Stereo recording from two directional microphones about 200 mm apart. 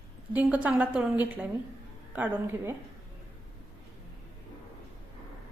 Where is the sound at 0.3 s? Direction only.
5° right (ahead or behind).